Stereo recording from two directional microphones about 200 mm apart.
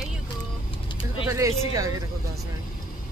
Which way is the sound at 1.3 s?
15° right (ahead or behind).